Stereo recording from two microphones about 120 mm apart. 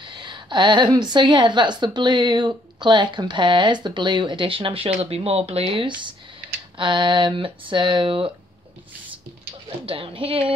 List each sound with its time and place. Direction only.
0.0 s a woman's voice: 40° right (ahead or behind)
9.8 s speech: 45° right (ahead or behind)